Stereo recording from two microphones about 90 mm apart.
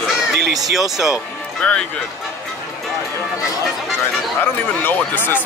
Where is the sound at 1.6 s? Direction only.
10° left (ahead or behind).